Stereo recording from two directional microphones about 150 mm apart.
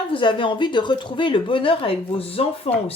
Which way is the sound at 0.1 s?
35° left (ahead or behind).